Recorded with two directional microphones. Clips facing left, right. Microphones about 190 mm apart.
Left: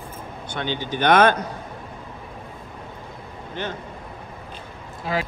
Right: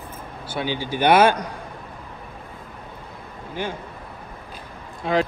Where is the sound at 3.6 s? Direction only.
10° right (ahead or behind).